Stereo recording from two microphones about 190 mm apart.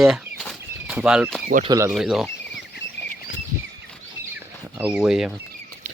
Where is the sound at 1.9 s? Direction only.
Centre (ahead or behind).